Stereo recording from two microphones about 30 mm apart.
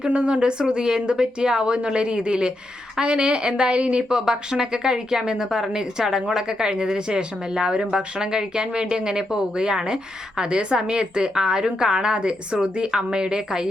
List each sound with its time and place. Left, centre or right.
0.1 s speech: right
0.7 s speech: right
4.1 s a woman's voice: right